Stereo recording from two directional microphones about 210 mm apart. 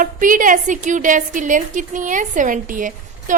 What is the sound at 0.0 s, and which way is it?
A woman's voice, 40° right (ahead or behind).